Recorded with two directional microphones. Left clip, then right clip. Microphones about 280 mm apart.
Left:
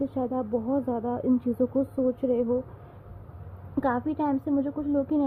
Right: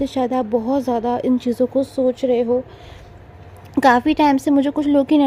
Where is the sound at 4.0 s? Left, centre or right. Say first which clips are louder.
Right 12 dB; right.